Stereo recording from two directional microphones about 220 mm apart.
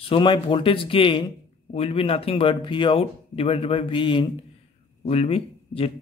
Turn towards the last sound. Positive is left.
turn(degrees=25)  # may be behind; listen again after turning